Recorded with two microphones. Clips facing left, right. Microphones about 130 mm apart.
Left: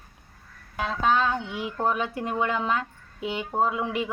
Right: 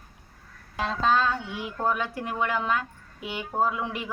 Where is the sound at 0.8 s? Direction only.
5° left (ahead or behind).